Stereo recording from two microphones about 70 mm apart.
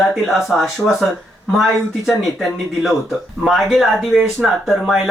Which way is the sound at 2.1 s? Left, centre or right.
Centre.